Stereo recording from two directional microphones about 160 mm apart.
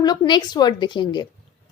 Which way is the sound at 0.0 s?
25° left (ahead or behind).